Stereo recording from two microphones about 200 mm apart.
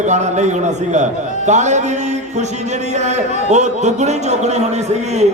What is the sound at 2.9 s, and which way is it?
A man's voice, 35° right (ahead or behind).